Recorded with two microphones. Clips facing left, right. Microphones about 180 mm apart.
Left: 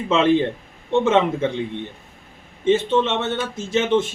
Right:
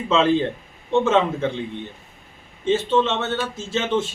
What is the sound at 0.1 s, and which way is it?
Speech, 15° left (ahead or behind).